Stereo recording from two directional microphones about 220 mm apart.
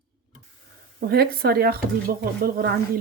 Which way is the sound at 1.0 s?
45° right (ahead or behind).